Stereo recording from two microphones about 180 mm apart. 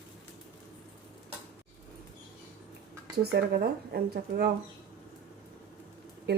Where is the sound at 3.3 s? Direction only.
65° right (ahead or behind).